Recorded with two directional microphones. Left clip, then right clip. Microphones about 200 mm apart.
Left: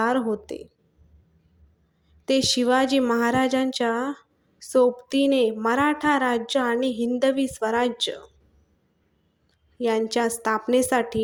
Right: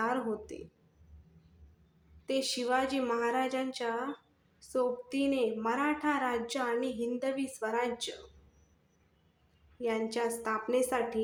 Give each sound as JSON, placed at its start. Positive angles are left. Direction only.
{"t": 0.0, "sound": "speech", "side_deg": 35}
{"t": 2.2, "sound": "a woman's voice", "side_deg": 35}
{"t": 9.8, "sound": "a woman's voice", "side_deg": 40}